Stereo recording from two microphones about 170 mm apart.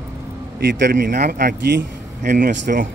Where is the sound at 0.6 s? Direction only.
85° right.